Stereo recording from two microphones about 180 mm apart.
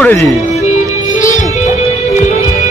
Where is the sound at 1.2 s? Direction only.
45° left (ahead or behind).